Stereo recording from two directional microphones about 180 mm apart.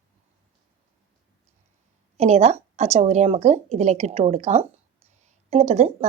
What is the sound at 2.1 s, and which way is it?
Speech, 35° right (ahead or behind).